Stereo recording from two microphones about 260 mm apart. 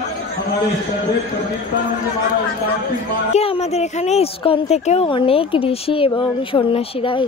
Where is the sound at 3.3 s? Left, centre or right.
Left.